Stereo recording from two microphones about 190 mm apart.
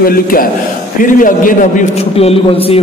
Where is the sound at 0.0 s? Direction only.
50° left (ahead or behind).